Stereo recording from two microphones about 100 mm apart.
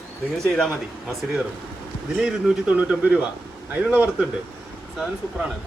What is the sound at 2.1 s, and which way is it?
Speech, 5° right (ahead or behind).